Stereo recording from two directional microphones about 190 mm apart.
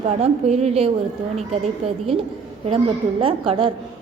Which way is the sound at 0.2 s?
35° right (ahead or behind).